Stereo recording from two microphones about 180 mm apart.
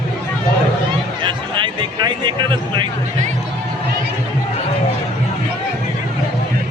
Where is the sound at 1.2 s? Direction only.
25° right (ahead or behind).